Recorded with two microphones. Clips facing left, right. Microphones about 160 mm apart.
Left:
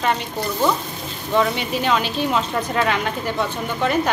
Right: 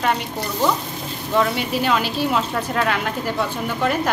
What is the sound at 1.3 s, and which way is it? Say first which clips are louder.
Speech: even; 5° right (ahead or behind).